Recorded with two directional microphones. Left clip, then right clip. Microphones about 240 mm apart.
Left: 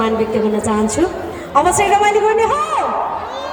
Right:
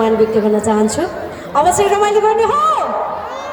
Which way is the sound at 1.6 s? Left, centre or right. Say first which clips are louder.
Right 1 dB; centre.